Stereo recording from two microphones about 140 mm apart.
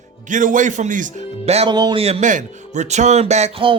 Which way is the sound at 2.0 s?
55° right (ahead or behind).